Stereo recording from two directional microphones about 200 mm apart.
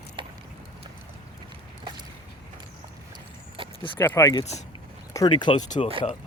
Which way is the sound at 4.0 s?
15° left (ahead or behind).